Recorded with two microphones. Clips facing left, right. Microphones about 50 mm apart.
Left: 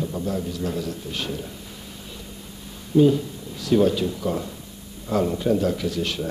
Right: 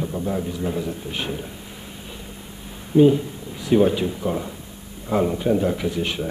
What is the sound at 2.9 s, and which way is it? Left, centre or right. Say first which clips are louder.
A man's voice: right 2 dB; right.